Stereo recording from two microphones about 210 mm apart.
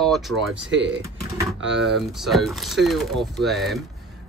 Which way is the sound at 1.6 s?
55° right (ahead or behind).